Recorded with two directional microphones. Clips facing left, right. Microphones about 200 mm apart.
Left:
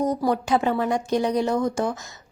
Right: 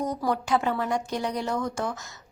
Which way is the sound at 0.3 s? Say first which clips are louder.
Left 1 dB; 20° left (ahead or behind).